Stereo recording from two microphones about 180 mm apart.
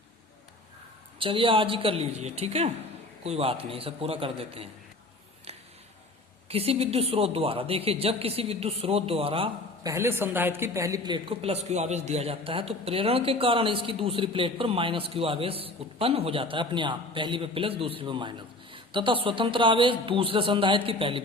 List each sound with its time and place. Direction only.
1.2 s a woman's voice: 30° right (ahead or behind)
6.5 s a woman's voice: 35° right (ahead or behind)
9.8 s a woman's voice: 15° right (ahead or behind)